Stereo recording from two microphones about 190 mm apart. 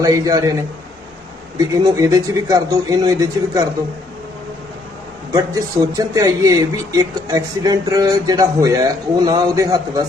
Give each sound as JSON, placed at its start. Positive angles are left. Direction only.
{"t": 0.0, "sound": "speech", "side_deg": -20}
{"t": 1.7, "sound": "speech", "side_deg": -15}
{"t": 5.3, "sound": "speech", "side_deg": -20}